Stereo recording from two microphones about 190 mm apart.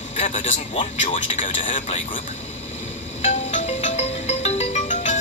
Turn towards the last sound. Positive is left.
turn(degrees=40)  # may be behind; listen again after turning